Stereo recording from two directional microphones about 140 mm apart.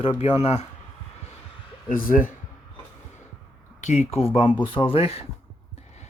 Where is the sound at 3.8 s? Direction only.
55° left (ahead or behind).